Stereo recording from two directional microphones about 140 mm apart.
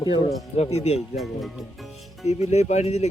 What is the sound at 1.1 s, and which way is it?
Speech, centre (ahead or behind).